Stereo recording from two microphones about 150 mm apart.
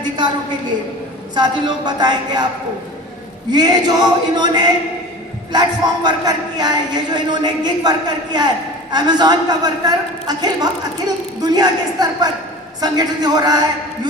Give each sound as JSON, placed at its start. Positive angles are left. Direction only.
{"t": 1.4, "sound": "a woman's voice", "side_deg": -30}
{"t": 3.5, "sound": "a woman's voice", "side_deg": -30}